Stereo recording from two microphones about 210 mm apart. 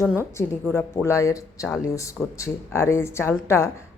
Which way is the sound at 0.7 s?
10° left (ahead or behind).